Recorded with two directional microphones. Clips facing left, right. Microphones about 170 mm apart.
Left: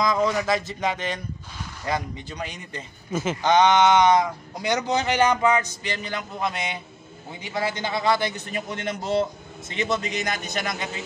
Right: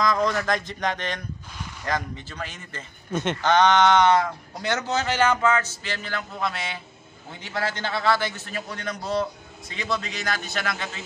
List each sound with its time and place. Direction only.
0.0 s speech: 10° left (ahead or behind)
3.1 s speech: 5° left (ahead or behind)